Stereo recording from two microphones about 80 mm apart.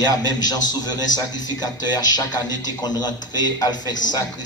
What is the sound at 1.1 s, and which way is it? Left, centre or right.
A man's voice, left.